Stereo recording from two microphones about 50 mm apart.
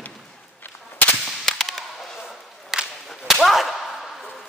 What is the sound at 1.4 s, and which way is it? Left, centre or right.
Whip, centre.